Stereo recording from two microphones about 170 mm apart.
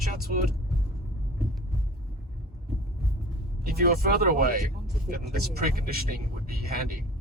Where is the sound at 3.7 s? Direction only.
60° right (ahead or behind).